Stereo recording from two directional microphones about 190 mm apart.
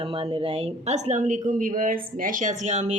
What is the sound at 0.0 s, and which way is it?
A woman's voice, 25° right (ahead or behind).